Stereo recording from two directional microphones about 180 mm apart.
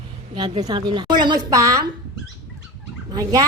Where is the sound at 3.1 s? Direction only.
20° right (ahead or behind).